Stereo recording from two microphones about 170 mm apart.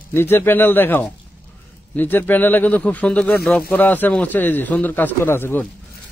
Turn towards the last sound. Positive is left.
turn(degrees=15)  # may be behind; listen again after turning